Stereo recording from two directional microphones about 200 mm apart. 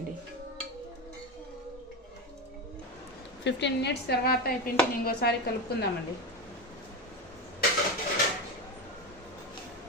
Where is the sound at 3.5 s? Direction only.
60° left (ahead or behind).